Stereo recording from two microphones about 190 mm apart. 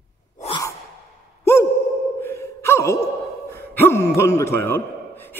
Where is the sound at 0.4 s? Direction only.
25° left (ahead or behind).